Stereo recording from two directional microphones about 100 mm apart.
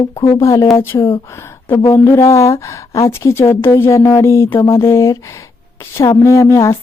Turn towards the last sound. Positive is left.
turn(degrees=30)  # may be behind; listen again after turning